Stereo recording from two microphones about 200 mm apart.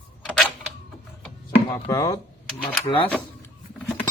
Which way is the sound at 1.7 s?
15° left (ahead or behind).